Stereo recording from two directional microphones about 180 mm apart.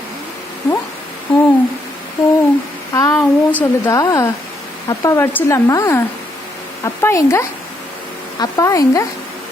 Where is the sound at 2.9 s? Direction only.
15° left (ahead or behind).